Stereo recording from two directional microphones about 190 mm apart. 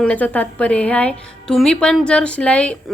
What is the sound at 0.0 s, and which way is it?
A woman's voice, 5° left (ahead or behind).